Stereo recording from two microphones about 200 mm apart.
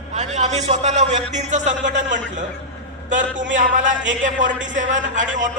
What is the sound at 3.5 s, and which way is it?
A man's voice, 40° right (ahead or behind).